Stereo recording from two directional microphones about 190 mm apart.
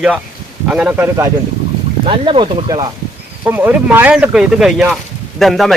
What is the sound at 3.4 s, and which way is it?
Speech, 10° right (ahead or behind).